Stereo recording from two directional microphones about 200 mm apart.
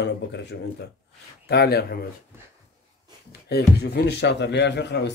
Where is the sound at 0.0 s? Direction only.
60° left (ahead or behind).